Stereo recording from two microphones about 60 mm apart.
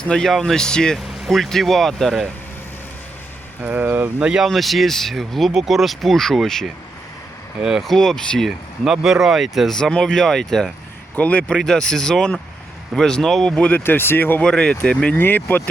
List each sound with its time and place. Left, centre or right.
0.0 s speech: centre
1.0 s speech: centre
3.6 s speech: right
4.2 s speech: centre
4.4 s speech: centre
7.6 s speech: centre
7.9 s speech: centre
8.4 s speech: centre
9.6 s speech: centre
11.1 s speech: left
13.8 s speech: left
14.4 s speech: centre
15.1 s speech: left